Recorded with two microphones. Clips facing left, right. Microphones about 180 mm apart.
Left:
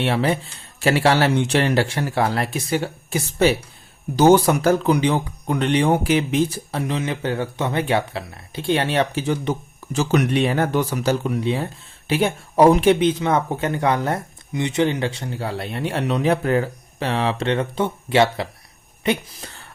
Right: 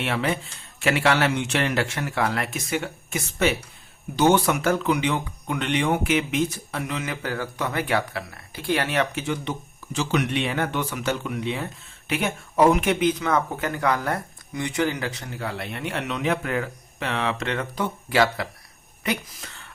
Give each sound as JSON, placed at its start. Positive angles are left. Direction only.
{"t": 0.0, "sound": "speech", "side_deg": 35}